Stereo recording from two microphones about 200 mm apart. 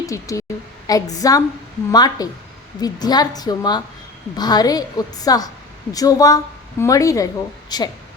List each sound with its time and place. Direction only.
0.0 s a woman's voice: 15° left (ahead or behind)